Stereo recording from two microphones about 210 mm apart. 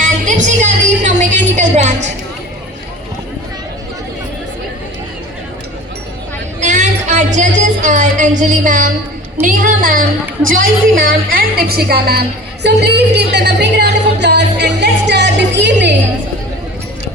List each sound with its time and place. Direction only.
0.0 s music: 35° right (ahead or behind)
1.5 s a woman's voice: 35° right (ahead or behind)
6.6 s music: 35° right (ahead or behind)
9.4 s a woman's voice: 40° right (ahead or behind)
12.6 s music: 50° right (ahead or behind)